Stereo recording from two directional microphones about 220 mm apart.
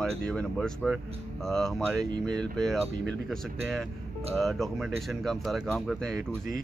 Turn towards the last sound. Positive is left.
turn(degrees=0)  # may be behind; listen again after turning